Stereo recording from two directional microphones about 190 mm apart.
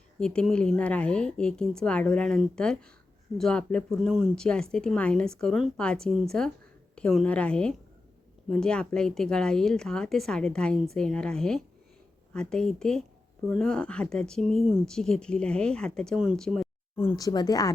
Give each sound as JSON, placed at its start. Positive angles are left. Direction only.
{"t": 0.2, "sound": "speech", "side_deg": 5}
{"t": 17.2, "sound": "speech", "side_deg": 20}